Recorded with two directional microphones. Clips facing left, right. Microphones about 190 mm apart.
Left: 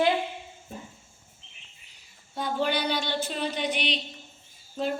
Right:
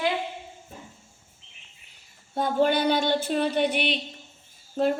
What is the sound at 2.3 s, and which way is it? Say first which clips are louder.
Speech: right 5 dB; 50° right (ahead or behind).